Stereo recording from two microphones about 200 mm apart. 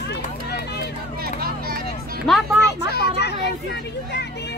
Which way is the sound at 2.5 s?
55° left (ahead or behind).